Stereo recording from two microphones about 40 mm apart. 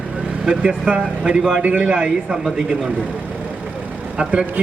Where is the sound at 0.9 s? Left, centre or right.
Right.